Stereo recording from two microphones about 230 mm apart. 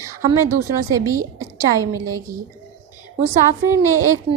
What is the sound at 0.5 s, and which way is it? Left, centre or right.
A woman's voice, centre.